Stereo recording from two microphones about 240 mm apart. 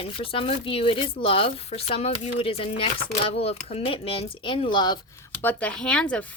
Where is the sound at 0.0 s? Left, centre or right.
Left.